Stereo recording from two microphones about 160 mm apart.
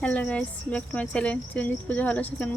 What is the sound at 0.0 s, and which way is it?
Speech, 10° left (ahead or behind).